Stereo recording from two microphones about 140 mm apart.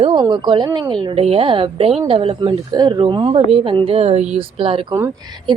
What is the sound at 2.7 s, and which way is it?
Speech, 30° right (ahead or behind).